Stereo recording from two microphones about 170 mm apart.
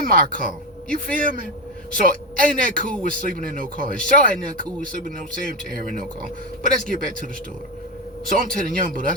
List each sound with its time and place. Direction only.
0.0 s speech: 55° right (ahead or behind)
8.3 s speech: 55° right (ahead or behind)